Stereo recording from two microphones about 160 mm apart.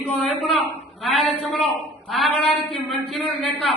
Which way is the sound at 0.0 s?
10° left (ahead or behind).